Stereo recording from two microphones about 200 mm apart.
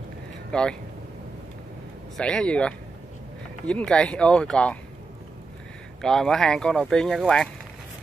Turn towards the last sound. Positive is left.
turn(degrees=5)  # may be behind; listen again after turning